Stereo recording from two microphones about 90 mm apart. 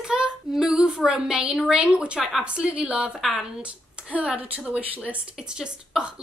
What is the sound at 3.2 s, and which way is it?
Speech, centre (ahead or behind).